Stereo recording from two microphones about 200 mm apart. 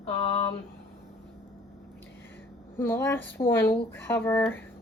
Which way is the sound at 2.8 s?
10° left (ahead or behind).